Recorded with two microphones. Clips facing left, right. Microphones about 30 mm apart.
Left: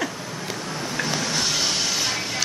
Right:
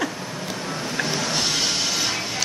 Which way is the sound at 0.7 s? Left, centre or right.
Centre.